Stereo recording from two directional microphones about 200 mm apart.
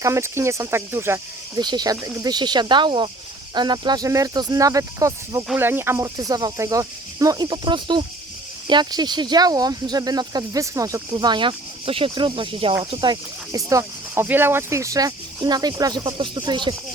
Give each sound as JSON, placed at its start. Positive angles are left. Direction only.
{"t": 0.0, "sound": "speech", "side_deg": -15}